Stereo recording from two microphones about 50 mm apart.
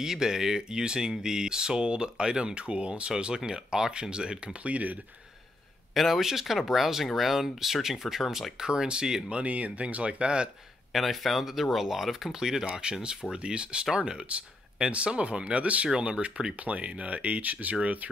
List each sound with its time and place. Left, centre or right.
0.0 s speech: centre; by 4.9 s right
5.9 s speech: centre
9.4 s speech: right
10.9 s speech: centre; by 17.7 s right